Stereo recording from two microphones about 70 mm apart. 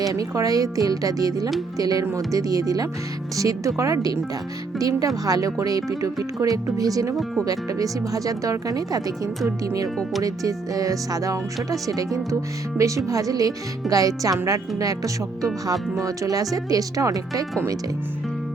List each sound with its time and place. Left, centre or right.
0.0 s speech: right